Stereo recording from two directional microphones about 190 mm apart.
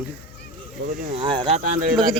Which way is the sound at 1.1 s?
25° right (ahead or behind).